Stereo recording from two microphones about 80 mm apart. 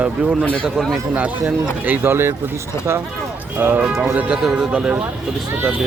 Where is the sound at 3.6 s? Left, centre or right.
Right.